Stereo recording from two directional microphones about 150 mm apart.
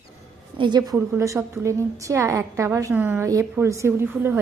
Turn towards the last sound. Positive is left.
turn(degrees=-15)  # may be behind; listen again after turning